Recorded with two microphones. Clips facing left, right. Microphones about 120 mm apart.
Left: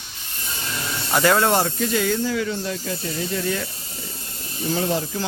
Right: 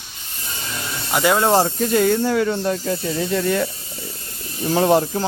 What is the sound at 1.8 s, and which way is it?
Speech, 50° right (ahead or behind).